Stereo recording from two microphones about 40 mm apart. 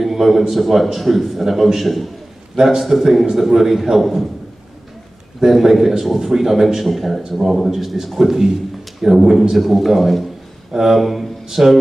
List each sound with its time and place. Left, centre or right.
0.0 s a man's voice: centre
5.4 s a man's voice: centre
7.2 s a man's voice: centre